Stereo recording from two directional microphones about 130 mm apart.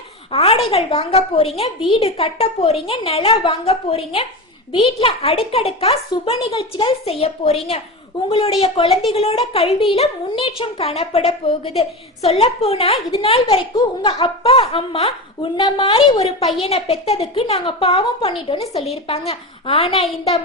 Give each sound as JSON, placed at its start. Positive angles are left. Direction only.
{"t": 0.3, "sound": "a woman's voice", "side_deg": 50}